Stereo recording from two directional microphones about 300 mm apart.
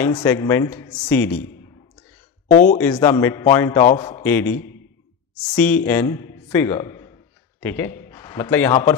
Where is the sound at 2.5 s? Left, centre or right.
Left.